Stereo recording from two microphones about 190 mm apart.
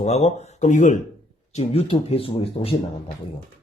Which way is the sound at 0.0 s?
35° left (ahead or behind).